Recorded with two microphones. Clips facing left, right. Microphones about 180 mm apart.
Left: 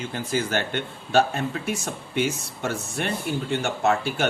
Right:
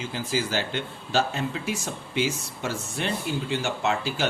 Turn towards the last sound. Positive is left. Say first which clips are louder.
# left 3 dB
turn(degrees=55)  # may be behind; listen again after turning